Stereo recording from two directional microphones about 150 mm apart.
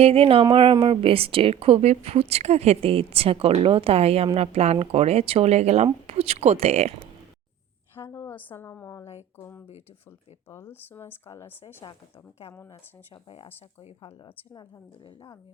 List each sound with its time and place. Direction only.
0.0 s a woman's voice: 40° right (ahead or behind)
8.1 s a woman's voice: 15° left (ahead or behind)
11.8 s speech: 30° left (ahead or behind)
13.2 s speech: 40° left (ahead or behind)